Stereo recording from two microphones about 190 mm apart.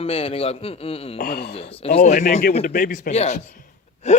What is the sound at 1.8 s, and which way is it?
Speech, 35° left (ahead or behind).